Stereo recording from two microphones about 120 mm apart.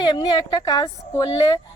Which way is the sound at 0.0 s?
35° left (ahead or behind).